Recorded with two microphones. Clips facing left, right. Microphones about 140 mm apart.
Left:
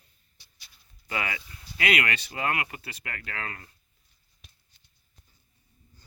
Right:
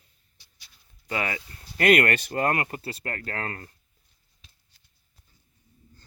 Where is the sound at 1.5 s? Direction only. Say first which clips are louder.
Right 9 dB; 45° right (ahead or behind).